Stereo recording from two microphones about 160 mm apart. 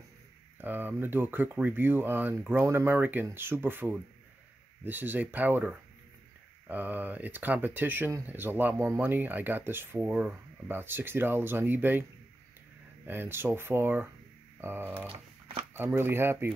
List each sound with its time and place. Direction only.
0.6 s speech: 10° right (ahead or behind)
13.0 s speech: 10° right (ahead or behind)
15.0 s a sound: 35° right (ahead or behind)
15.7 s speech: 15° right (ahead or behind)